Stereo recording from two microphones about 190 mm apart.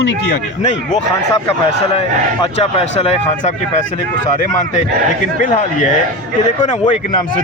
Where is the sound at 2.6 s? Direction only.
30° left (ahead or behind).